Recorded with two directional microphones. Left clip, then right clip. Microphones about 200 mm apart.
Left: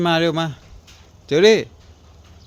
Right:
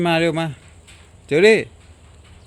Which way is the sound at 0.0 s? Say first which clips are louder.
Even; centre (ahead or behind).